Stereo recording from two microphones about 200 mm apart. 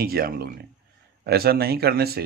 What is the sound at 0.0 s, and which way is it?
Speech, 50° right (ahead or behind).